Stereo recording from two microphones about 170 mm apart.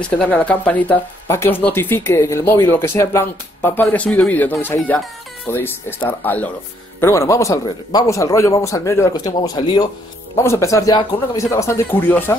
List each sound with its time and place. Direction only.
0.0 s a man's voice: 5° left (ahead or behind)